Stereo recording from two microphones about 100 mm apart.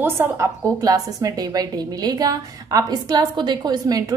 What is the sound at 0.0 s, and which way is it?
A woman's voice, 25° right (ahead or behind).